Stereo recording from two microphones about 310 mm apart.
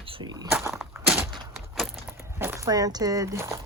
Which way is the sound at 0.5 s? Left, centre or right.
Centre.